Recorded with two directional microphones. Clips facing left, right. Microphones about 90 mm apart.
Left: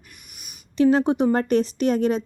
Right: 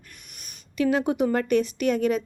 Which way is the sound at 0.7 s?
35° left (ahead or behind).